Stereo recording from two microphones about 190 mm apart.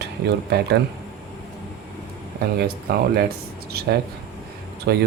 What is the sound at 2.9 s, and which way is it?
Speech, 55° right (ahead or behind).